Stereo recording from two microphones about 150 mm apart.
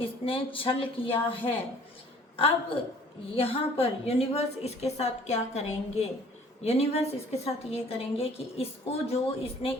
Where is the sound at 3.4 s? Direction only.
40° left (ahead or behind).